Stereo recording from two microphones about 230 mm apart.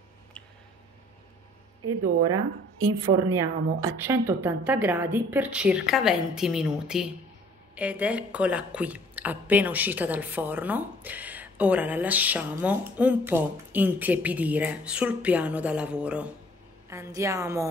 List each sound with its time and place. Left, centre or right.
1.9 s speech: right
3.3 s a woman's voice: centre